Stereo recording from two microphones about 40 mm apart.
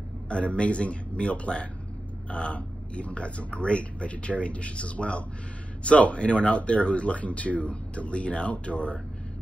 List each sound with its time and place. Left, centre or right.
0.3 s a man's voice: left